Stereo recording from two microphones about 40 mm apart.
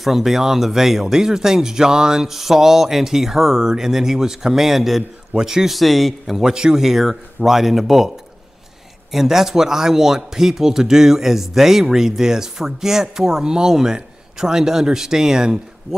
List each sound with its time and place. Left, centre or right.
0.0 s speech: centre
5.7 s a man's voice: centre
6.5 s speech: centre
6.8 s speech: centre
9.1 s speech: centre